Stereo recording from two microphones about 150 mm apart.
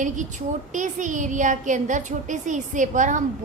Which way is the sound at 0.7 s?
55° right (ahead or behind).